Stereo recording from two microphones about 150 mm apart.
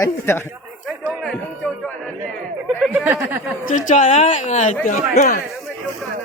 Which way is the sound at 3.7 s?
55° left (ahead or behind).